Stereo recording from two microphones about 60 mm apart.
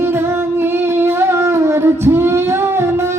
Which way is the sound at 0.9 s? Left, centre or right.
Right.